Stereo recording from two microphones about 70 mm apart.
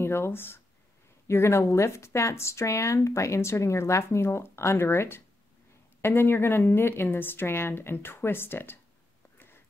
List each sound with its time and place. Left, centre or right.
0.0 s a woman's voice: left